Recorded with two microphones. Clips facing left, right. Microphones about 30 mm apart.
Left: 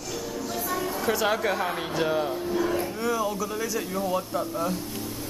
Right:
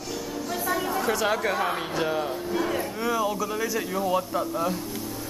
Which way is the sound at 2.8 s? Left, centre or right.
Centre.